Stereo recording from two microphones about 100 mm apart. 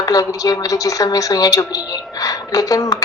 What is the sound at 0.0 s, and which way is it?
A woman's voice, 35° left (ahead or behind).